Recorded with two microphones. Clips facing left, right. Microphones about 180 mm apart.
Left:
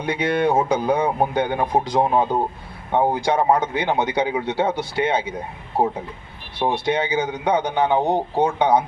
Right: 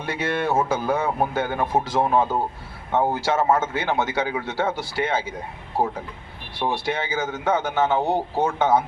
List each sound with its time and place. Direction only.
0.0 s a man's voice: 15° left (ahead or behind)
6.8 s a man's voice: 20° left (ahead or behind)